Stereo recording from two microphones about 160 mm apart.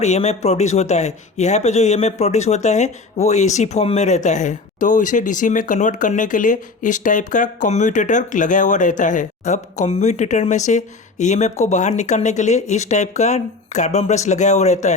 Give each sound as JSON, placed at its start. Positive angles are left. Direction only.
{"t": 0.0, "sound": "speech", "side_deg": 45}